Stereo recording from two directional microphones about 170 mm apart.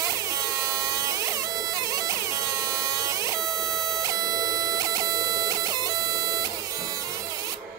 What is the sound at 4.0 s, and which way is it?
Music, 20° right (ahead or behind).